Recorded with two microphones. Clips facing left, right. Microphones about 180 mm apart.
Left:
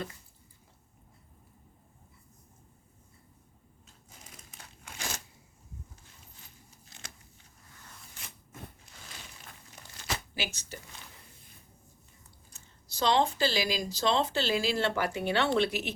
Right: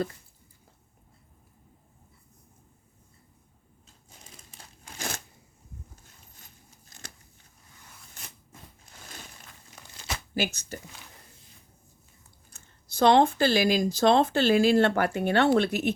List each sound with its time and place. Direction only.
4.5 s crumpling: 35° right (ahead or behind)
6.9 s scissors: 45° right (ahead or behind)
8.2 s a sound: 45° right (ahead or behind)
10.3 s speech: 45° right (ahead or behind)
12.5 s speech: 55° right (ahead or behind)